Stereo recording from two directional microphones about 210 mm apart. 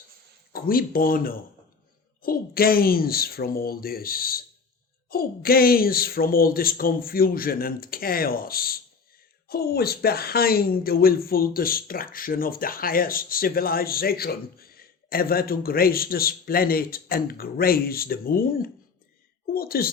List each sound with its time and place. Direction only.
0.5 s a woman's voice: 45° left (ahead or behind)